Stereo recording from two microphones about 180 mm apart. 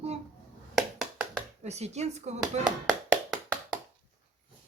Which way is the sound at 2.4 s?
Centre (ahead or behind).